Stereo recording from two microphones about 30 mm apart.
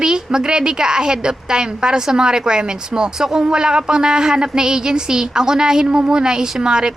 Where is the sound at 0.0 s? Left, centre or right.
Right.